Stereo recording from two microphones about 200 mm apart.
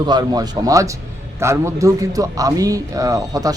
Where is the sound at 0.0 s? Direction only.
20° right (ahead or behind).